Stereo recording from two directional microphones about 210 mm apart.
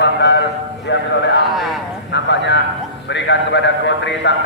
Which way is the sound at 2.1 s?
55° left (ahead or behind).